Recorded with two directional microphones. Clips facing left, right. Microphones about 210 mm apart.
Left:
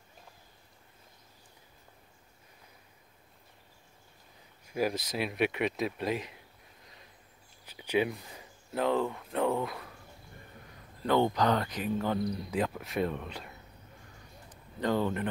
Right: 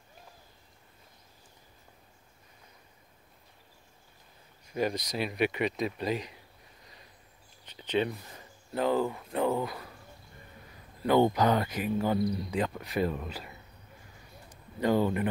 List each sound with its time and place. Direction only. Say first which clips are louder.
4.7 s speech: even; 5° left (ahead or behind)
7.6 s speech: even; 10° left (ahead or behind)
11.0 s speech: right 3 dB; 10° right (ahead or behind)
14.8 s speech: right 3 dB; 10° right (ahead or behind)